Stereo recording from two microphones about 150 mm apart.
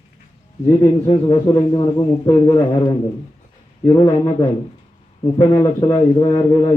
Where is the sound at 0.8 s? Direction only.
35° left (ahead or behind).